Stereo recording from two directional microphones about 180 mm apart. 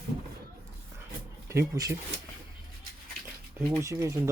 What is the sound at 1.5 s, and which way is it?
Speech, 15° right (ahead or behind).